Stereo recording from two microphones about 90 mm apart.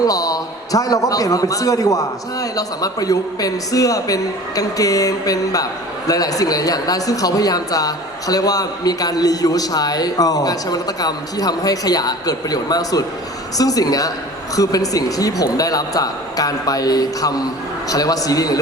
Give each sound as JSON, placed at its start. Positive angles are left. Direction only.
{"t": 0.0, "sound": "a man's voice", "side_deg": 40}